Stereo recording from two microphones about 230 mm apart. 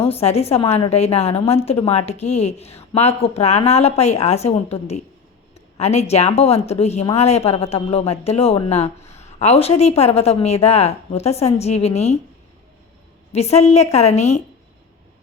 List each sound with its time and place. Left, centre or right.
0.0 s a woman's voice: left
13.3 s a woman's voice: left